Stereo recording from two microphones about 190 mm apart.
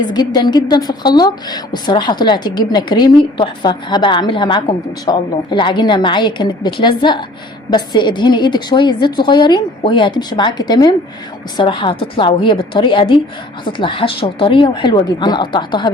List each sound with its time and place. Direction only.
0.0 s speech: 20° left (ahead or behind)